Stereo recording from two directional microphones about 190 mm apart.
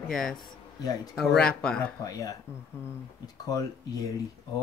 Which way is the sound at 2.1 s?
20° left (ahead or behind).